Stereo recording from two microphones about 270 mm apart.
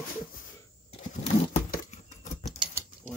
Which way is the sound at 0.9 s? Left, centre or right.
Left.